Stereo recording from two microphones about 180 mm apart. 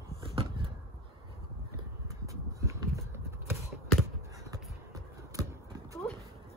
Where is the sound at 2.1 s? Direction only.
15° right (ahead or behind).